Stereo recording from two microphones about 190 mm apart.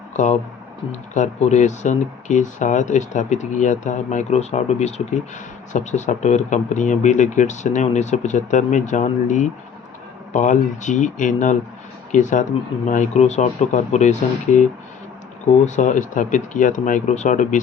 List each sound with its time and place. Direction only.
0.1 s speech: 40° left (ahead or behind)